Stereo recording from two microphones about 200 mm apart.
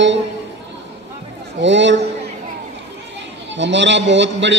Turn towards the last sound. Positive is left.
turn(degrees=-65)  # may be behind; listen again after turning